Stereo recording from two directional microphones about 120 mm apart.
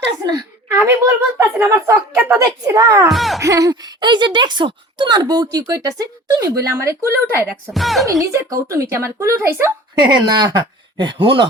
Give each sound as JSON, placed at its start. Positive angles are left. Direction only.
{"t": 0.8, "sound": "speech", "side_deg": -20}
{"t": 2.7, "sound": "speech", "side_deg": -25}
{"t": 3.1, "sound": "speech", "side_deg": 0}
{"t": 3.4, "sound": "speech", "side_deg": -30}
{"t": 7.7, "sound": "speech", "side_deg": 0}
{"t": 8.2, "sound": "speech", "side_deg": -25}
{"t": 10.0, "sound": "speech", "side_deg": -40}